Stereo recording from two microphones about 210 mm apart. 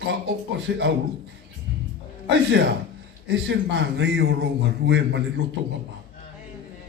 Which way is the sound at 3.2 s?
55° right (ahead or behind).